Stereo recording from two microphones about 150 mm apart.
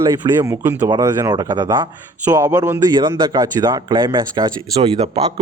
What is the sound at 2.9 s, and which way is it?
Speech, 30° right (ahead or behind).